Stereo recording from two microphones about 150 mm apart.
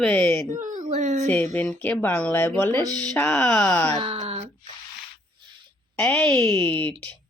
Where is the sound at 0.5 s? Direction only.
60° right (ahead or behind).